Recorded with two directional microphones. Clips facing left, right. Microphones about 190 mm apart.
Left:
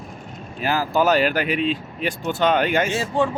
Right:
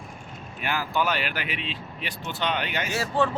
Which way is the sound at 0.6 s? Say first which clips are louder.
Left 7 dB; 35° left (ahead or behind).